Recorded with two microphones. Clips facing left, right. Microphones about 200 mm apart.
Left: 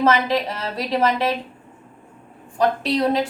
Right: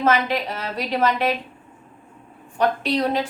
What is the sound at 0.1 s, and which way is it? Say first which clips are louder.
Speech: left 2 dB; 30° left (ahead or behind).